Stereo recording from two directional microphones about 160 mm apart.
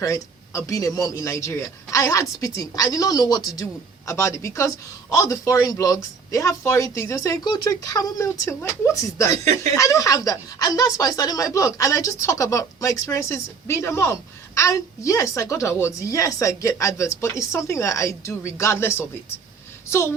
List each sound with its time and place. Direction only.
0.0 s speech: 20° left (ahead or behind)